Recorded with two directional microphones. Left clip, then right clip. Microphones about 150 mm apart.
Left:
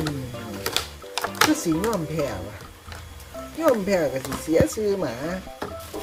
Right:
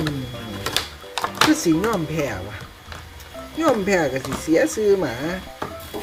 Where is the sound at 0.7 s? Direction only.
20° left (ahead or behind).